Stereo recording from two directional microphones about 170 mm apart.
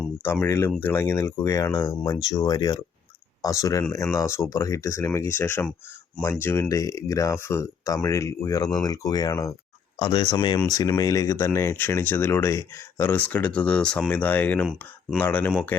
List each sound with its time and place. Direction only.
0.2 s speech: 10° left (ahead or behind)